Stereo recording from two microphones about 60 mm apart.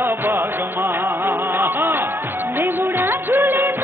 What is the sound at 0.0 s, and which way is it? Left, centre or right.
Music, right.